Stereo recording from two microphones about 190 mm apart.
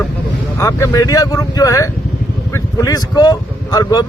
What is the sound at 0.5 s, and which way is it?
Speech, 15° left (ahead or behind).